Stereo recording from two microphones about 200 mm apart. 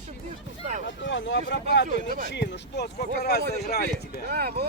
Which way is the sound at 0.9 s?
65° left (ahead or behind).